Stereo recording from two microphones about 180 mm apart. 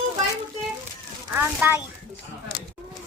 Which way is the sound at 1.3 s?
10° right (ahead or behind).